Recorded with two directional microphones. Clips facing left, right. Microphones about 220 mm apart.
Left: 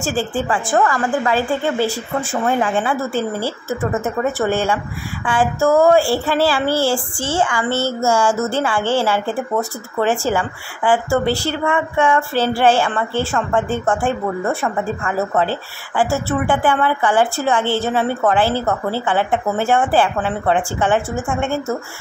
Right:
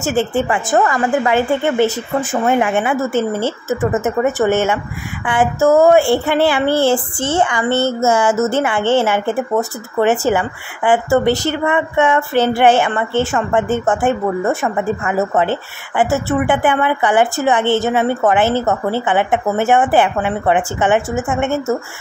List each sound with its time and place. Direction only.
0.0 s a woman's voice: 20° right (ahead or behind)
7.6 s a sound: 10° left (ahead or behind)
8.0 s a woman's voice: 20° right (ahead or behind)